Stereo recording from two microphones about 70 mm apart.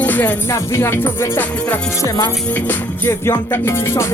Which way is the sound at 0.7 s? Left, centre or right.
Left.